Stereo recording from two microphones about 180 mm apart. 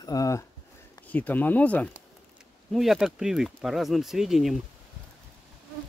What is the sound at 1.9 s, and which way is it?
Speech, centre (ahead or behind).